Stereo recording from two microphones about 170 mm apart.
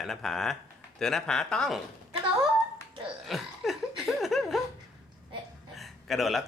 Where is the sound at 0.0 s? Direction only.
Centre (ahead or behind).